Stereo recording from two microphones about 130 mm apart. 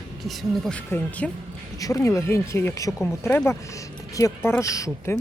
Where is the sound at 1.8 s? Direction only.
25° left (ahead or behind).